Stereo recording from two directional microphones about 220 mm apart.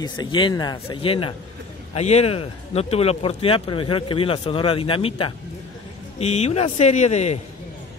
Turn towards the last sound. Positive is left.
turn(degrees=30)  # may be behind; listen again after turning